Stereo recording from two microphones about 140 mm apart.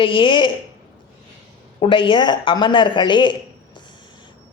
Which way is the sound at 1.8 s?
35° left (ahead or behind).